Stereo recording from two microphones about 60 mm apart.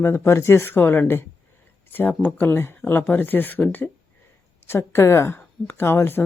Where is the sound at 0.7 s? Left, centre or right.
Left.